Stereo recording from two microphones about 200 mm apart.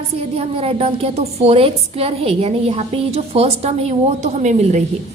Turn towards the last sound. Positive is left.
turn(degrees=-35)  # may be behind; listen again after turning